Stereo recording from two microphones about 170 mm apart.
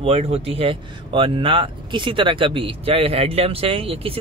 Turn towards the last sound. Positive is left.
turn(degrees=-35)  # may be behind; listen again after turning